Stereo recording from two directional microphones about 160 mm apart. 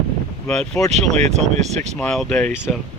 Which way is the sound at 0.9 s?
45° right (ahead or behind).